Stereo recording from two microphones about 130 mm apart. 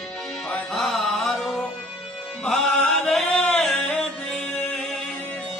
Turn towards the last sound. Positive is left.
turn(degrees=5)  # may be behind; listen again after turning